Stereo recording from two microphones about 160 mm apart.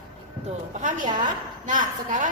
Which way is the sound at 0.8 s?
50° right (ahead or behind).